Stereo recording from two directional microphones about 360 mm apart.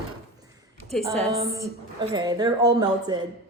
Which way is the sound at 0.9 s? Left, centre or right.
Centre.